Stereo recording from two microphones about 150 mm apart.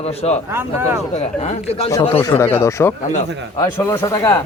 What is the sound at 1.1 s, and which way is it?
Speech, 45° left (ahead or behind).